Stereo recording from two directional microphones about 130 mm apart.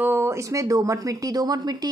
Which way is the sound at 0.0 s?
20° right (ahead or behind).